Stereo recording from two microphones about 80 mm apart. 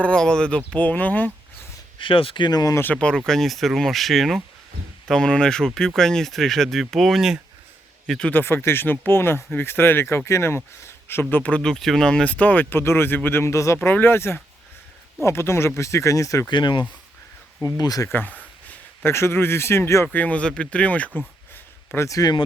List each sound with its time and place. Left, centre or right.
0.0 s speech: centre
2.0 s speech: left
2.8 s speech: centre
3.2 s speech: centre
8.3 s speech: left
11.6 s speech: centre; by 13.7 s left
13.7 s speech: left
16.5 s speech: left
17.6 s speech: left
18.1 s speech: left
20.1 s speech: centre
21.5 s a sound: left